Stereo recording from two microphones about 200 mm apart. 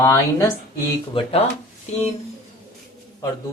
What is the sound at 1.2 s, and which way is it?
Speech, 25° left (ahead or behind).